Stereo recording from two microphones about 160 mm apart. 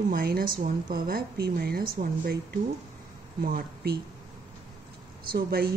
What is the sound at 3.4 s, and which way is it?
Speech, 70° right (ahead or behind).